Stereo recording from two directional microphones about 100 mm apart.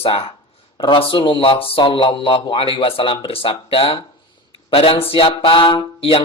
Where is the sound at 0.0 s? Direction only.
70° left (ahead or behind).